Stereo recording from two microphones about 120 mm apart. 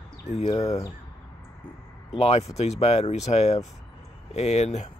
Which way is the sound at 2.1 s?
60° left (ahead or behind).